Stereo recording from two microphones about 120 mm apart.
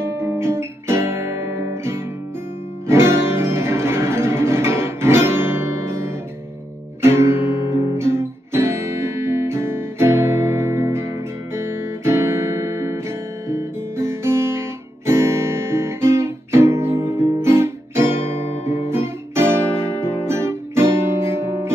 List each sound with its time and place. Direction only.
0.0 s guitar: 20° right (ahead or behind)
2.9 s music: 20° right (ahead or behind)
7.0 s guitar: 20° right (ahead or behind)
13.5 s music: 20° right (ahead or behind)
15.0 s guitar: 20° right (ahead or behind)
18.5 s guitar: 70° left (ahead or behind)
18.9 s guitar: 20° right (ahead or behind)